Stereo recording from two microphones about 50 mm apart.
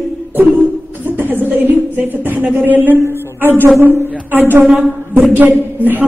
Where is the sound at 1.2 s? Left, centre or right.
Right.